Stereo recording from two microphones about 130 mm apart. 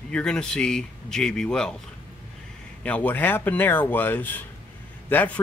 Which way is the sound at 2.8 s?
10° left (ahead or behind).